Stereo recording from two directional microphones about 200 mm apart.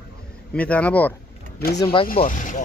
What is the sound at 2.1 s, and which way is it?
Speech, 40° left (ahead or behind).